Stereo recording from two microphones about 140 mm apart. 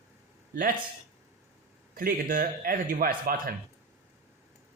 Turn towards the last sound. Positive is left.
turn(degrees=-90)